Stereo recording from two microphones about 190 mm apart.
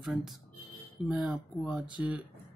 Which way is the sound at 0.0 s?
5° right (ahead or behind).